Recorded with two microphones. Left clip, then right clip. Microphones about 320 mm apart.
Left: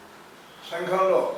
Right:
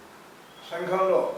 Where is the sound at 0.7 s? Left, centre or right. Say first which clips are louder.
Left 2 dB; centre.